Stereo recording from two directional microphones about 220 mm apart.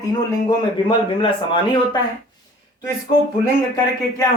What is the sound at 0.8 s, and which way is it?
Speech, 25° left (ahead or behind).